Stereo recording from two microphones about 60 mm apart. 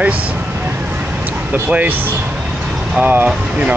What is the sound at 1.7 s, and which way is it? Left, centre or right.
Speech, right.